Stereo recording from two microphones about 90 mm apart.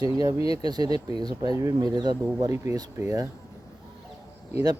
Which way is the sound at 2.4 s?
35° right (ahead or behind).